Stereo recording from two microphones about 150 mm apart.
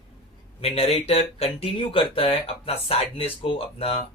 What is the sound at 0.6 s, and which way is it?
Speech, 40° left (ahead or behind).